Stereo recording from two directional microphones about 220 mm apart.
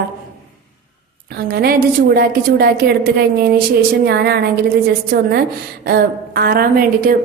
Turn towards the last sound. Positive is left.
turn(degrees=-40)  # may be behind; listen again after turning